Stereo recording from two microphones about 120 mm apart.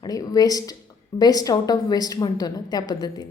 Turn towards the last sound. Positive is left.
turn(degrees=35)  # may be behind; listen again after turning